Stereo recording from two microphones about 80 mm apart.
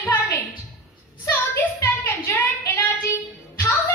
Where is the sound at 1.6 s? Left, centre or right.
Left.